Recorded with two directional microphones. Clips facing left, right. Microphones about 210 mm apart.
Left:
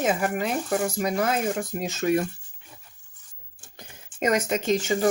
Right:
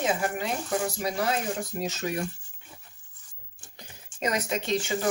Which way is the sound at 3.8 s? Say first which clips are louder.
Left 5 dB; 50° left (ahead or behind).